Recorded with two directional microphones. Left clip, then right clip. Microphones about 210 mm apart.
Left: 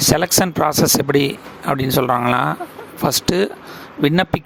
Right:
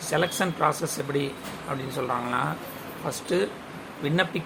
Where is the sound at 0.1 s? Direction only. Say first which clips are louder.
Left 4 dB; 55° left (ahead or behind).